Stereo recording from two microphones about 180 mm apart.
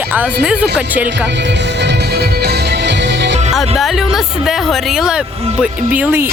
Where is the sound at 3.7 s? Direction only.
Centre (ahead or behind).